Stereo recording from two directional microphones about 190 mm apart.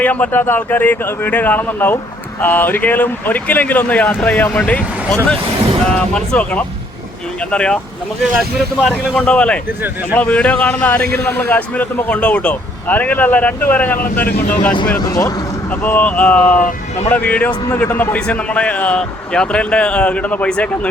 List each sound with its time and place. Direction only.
0.0 s a man's voice: 10° left (ahead or behind)
11.0 s a man's voice: 55° right (ahead or behind)
11.3 s a man's voice: 10° left (ahead or behind)
16.6 s speech: 45° left (ahead or behind)
17.1 s a man's voice: 10° left (ahead or behind)